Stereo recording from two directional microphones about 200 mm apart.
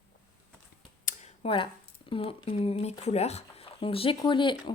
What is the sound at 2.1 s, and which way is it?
Speech, 25° left (ahead or behind).